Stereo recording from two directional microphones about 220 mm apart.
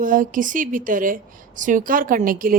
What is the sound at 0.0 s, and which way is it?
A woman's voice, 35° right (ahead or behind).